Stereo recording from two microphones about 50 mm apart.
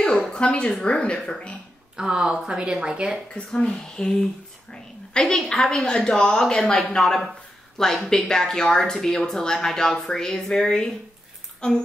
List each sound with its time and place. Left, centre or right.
0.3 s a woman's voice: centre
2.0 s speech: centre
3.7 s a woman's voice: centre